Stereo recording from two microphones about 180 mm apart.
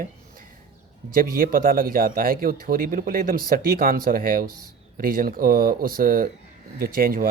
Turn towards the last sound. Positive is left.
turn(degrees=-55)  # may be behind; listen again after turning